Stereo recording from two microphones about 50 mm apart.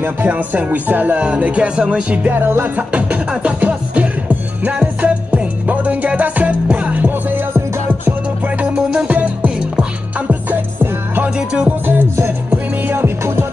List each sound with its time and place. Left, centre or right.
0.3 s speech: right
2.3 s music: right
2.9 s music: right
8.7 s music: centre
9.1 s music: right
11.3 s music: right
11.8 s music: right